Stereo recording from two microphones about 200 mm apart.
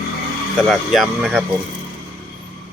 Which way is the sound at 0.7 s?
Centre (ahead or behind).